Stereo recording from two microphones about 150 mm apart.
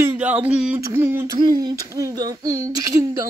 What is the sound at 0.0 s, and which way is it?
Speech, 15° right (ahead or behind).